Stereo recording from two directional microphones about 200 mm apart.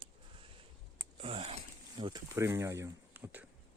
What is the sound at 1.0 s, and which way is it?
Zipper, 25° right (ahead or behind).